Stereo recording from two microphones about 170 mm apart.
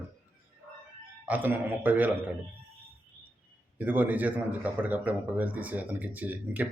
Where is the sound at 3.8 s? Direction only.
10° right (ahead or behind).